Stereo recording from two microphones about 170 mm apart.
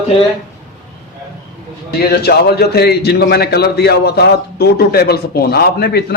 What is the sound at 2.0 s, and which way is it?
A man's voice, 70° left (ahead or behind).